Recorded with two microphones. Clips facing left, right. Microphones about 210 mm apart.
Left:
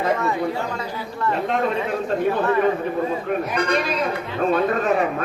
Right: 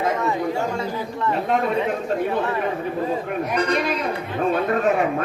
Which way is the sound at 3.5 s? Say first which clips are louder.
Right 3 dB; 40° right (ahead or behind).